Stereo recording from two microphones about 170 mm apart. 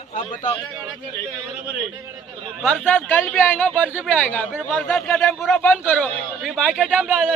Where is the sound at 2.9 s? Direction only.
10° left (ahead or behind).